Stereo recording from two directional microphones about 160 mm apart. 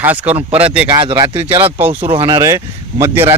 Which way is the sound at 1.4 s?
10° right (ahead or behind).